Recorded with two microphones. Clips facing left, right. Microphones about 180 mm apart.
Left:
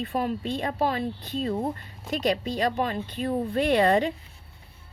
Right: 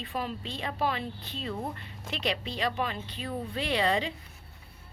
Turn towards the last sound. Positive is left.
turn(degrees=50)  # may be behind; listen again after turning